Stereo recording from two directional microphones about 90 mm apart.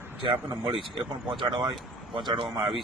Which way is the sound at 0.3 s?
60° right (ahead or behind).